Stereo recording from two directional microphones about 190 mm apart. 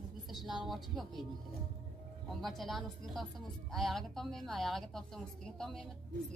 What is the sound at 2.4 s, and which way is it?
Speech, centre (ahead or behind).